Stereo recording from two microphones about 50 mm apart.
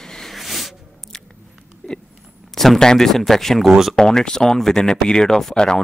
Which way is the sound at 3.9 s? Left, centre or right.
Centre.